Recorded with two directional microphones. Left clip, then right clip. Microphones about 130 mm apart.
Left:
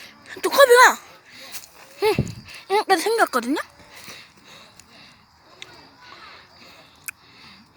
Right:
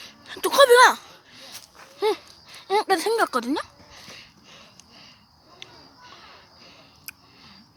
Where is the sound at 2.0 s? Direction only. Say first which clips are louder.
Left 3 dB; 20° left (ahead or behind).